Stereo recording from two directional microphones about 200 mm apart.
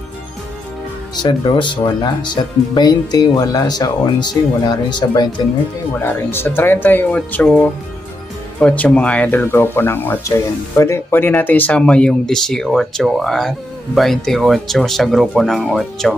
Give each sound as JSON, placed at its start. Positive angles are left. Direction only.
{"t": 1.2, "sound": "speech", "side_deg": 25}